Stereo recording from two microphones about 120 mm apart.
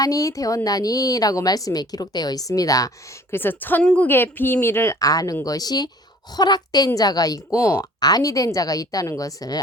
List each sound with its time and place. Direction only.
0.0 s a woman's voice: 30° left (ahead or behind)
3.3 s a woman's voice: 15° left (ahead or behind)